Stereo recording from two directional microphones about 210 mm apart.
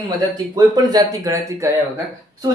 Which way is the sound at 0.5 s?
20° right (ahead or behind).